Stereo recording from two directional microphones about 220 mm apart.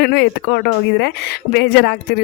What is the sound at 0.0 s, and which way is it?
Speech, 50° left (ahead or behind).